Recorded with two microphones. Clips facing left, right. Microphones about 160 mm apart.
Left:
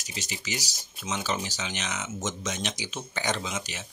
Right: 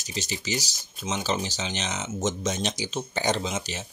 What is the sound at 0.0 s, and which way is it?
Speech, 30° right (ahead or behind).